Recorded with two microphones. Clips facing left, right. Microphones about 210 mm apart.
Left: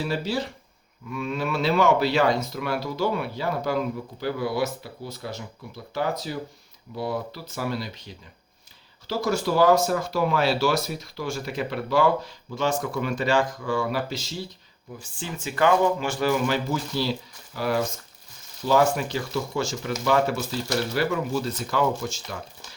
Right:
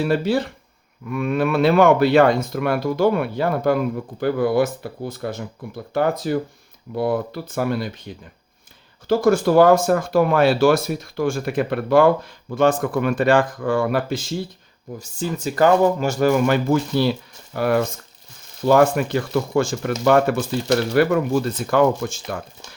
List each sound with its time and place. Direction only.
0.0 s speech: 55° right (ahead or behind)
14.9 s speech: 40° right (ahead or behind)